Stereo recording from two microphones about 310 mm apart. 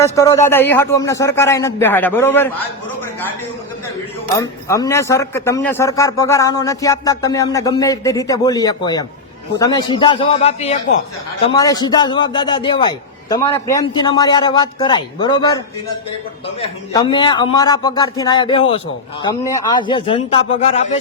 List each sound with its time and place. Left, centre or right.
0.0 s a man's voice: centre
4.4 s a man's voice: centre